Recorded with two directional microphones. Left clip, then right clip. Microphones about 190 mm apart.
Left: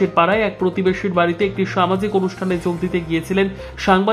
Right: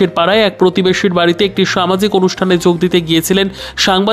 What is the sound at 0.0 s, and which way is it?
Speech, 40° right (ahead or behind).